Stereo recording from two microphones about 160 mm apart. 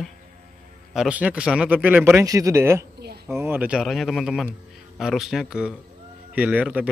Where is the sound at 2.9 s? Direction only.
85° right.